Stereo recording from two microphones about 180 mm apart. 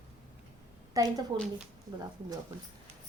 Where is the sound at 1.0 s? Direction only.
20° right (ahead or behind).